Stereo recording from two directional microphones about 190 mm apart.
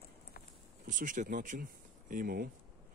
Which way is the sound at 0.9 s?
40° right (ahead or behind).